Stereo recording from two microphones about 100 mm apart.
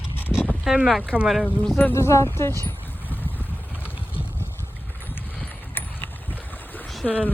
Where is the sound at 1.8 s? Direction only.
25° left (ahead or behind).